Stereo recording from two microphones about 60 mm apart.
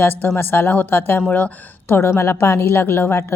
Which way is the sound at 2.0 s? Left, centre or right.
Left.